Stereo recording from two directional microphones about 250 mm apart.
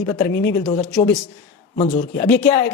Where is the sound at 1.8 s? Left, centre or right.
Left.